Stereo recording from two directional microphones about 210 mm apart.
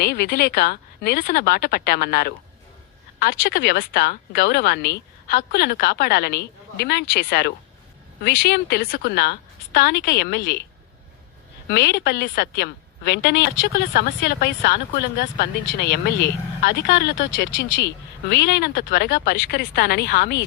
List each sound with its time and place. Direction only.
0.0 s a woman's voice: 45° left (ahead or behind)
11.7 s a woman's voice: 50° left (ahead or behind)